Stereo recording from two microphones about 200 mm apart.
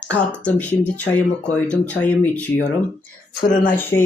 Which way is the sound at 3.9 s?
15° left (ahead or behind).